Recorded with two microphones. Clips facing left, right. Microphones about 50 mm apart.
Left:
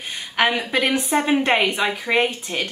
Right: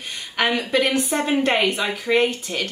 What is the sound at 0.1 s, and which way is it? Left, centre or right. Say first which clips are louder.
A woman's voice: left 2 dB; centre.